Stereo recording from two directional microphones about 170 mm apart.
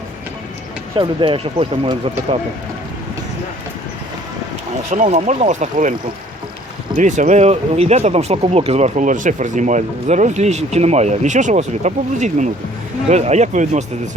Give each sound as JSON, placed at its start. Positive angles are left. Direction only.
{"t": 0.9, "sound": "speech", "side_deg": -30}
{"t": 5.0, "sound": "speech", "side_deg": -45}
{"t": 6.9, "sound": "speech", "side_deg": -45}